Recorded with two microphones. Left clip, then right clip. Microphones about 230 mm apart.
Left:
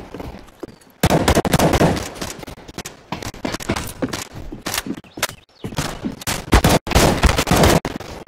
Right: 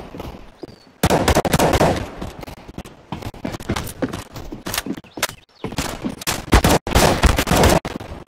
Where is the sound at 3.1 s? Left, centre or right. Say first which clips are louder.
Left 3 dB; left.